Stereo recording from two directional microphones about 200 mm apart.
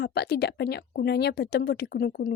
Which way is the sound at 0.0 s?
55° left (ahead or behind).